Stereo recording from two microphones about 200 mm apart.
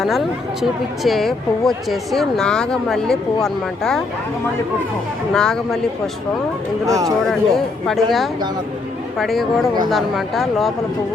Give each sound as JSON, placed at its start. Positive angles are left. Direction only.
{"t": 0.0, "sound": "speech", "side_deg": 0}
{"t": 5.3, "sound": "speech", "side_deg": 5}
{"t": 6.8, "sound": "speech", "side_deg": -15}
{"t": 7.3, "sound": "speech", "side_deg": 0}
{"t": 9.1, "sound": "speech", "side_deg": 0}